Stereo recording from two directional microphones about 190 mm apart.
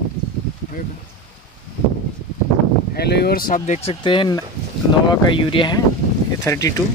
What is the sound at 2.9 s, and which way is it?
Speech, 60° left (ahead or behind).